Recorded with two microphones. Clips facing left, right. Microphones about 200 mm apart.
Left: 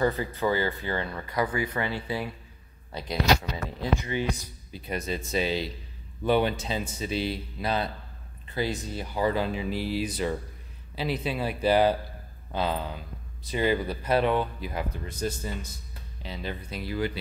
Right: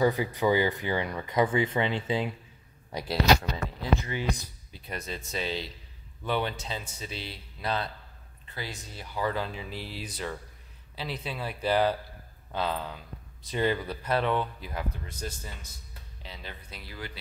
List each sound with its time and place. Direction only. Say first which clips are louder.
0.0 s speech: right 1 dB; 15° right (ahead or behind)
4.0 s speech: left 4 dB; 20° left (ahead or behind)
4.7 s speech: left 6 dB; 5° left (ahead or behind)
16.2 s speech: left 9 dB; 5° left (ahead or behind)